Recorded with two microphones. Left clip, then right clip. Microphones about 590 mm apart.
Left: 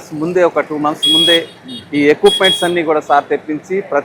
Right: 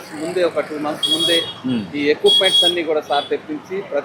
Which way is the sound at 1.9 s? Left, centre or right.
Left.